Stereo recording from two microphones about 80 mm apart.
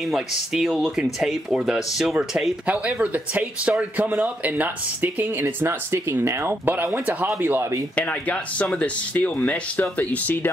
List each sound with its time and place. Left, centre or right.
0.1 s speech: centre; by 5.3 s right
5.4 s speech: right
7.9 s speech: centre